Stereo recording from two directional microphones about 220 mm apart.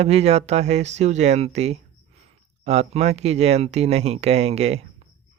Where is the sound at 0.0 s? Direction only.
30° right (ahead or behind).